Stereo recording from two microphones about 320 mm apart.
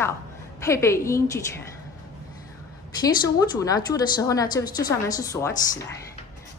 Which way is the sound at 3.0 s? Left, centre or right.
Centre.